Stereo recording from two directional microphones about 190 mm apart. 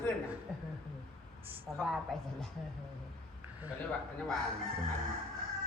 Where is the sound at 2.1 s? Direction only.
Centre (ahead or behind).